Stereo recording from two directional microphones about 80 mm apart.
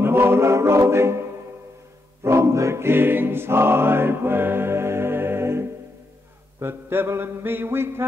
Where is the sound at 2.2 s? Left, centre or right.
Right.